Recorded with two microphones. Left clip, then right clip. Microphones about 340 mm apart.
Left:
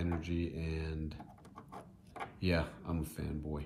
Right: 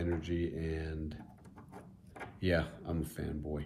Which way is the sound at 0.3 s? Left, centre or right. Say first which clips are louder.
Right 3 dB; centre.